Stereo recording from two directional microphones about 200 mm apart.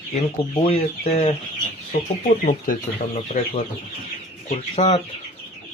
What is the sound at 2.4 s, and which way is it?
Speech, 40° left (ahead or behind).